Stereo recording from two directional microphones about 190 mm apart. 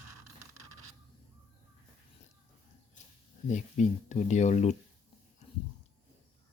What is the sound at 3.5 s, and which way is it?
Speech, 40° left (ahead or behind).